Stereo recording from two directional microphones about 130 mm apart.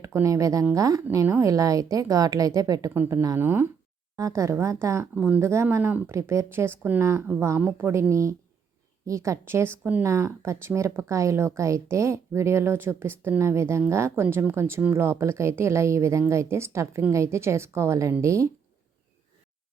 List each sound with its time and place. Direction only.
0.0 s speech: 25° right (ahead or behind)
5.1 s speech: 10° right (ahead or behind)